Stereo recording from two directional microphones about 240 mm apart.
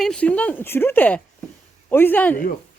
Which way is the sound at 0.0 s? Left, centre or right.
Centre.